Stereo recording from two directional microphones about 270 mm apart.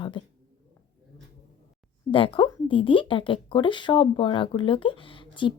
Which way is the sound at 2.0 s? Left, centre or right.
Centre.